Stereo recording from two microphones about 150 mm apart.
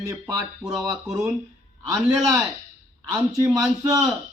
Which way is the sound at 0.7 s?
5° right (ahead or behind).